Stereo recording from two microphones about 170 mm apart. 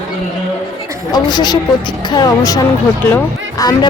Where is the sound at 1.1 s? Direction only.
25° left (ahead or behind).